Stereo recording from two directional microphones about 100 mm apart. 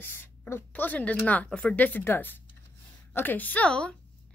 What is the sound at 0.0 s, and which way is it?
A woman's voice, 20° left (ahead or behind).